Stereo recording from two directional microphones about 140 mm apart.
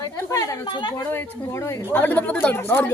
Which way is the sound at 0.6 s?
35° left (ahead or behind).